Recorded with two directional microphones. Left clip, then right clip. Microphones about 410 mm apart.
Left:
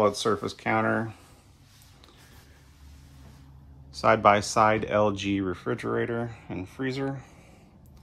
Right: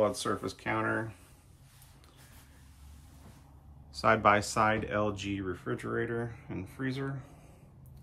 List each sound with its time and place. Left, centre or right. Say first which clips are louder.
0.0 s speech: left 6 dB; centre
3.9 s speech: left 5 dB; centre